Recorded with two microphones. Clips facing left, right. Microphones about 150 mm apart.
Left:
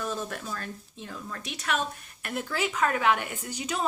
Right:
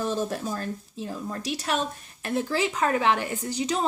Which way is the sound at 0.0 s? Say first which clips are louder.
Right 6 dB; 30° right (ahead or behind).